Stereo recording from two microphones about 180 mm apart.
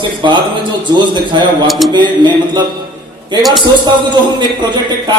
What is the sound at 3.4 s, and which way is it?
Speech, centre (ahead or behind).